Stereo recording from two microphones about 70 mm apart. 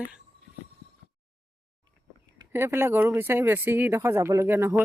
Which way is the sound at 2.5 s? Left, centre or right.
Right.